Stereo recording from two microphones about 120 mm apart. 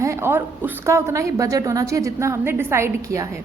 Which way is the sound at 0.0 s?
20° right (ahead or behind).